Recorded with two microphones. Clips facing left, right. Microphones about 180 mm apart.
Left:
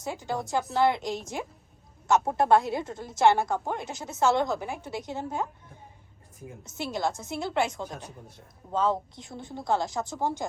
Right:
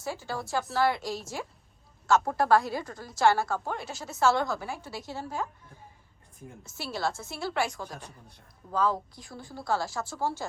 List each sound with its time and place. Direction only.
0.0 s a woman's voice: 20° left (ahead or behind)
6.6 s a woman's voice: 20° left (ahead or behind)